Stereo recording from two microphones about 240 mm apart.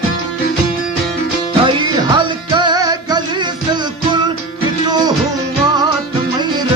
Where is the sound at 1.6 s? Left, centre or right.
Centre.